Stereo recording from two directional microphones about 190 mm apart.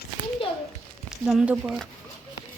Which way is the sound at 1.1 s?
5° right (ahead or behind).